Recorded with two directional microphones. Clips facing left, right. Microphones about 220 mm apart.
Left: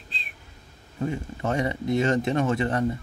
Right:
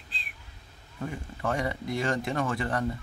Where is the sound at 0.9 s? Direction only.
25° left (ahead or behind).